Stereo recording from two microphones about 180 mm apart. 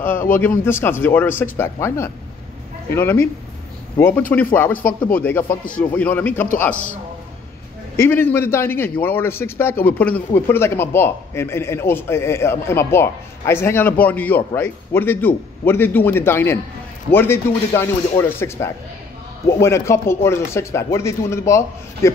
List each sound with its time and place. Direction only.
0.0 s a man's voice: 10° left (ahead or behind)
8.0 s speech: 10° left (ahead or behind)